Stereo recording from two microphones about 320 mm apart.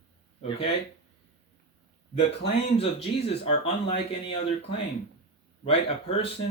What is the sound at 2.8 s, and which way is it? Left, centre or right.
Speech, centre.